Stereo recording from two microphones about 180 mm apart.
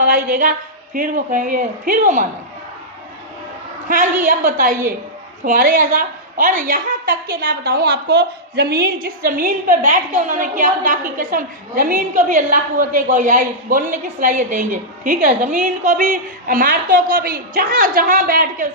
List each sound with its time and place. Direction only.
0.0 s a woman's voice: 55° right (ahead or behind)
4.2 s a woman's voice: 50° right (ahead or behind)